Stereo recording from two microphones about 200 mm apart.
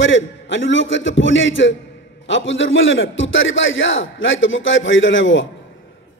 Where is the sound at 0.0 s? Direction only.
65° left (ahead or behind).